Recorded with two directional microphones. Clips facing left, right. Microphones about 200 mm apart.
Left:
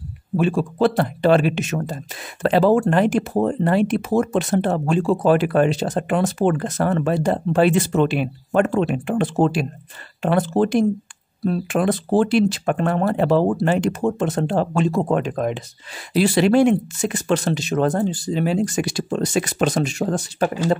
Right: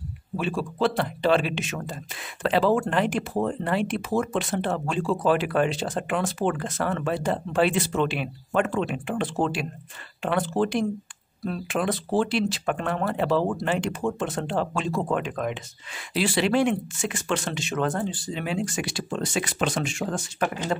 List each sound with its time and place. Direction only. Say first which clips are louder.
0.4 s speech: left 7 dB; 50° left (ahead or behind)